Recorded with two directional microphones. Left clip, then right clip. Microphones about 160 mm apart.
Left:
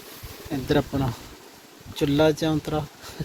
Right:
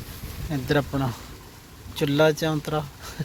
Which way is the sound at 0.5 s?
5° left (ahead or behind).